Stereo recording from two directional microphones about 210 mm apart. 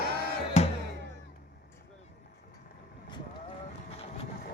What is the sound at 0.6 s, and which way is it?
Music, 30° left (ahead or behind).